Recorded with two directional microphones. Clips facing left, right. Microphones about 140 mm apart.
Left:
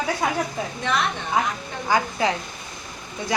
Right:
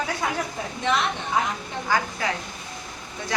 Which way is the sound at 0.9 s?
20° right (ahead or behind).